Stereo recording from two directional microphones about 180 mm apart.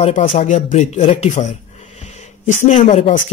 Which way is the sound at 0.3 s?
40° left (ahead or behind).